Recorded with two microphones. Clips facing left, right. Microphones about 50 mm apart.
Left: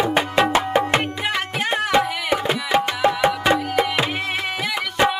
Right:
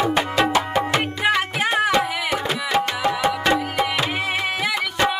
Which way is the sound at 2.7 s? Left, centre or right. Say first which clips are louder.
Left 1 dB; left.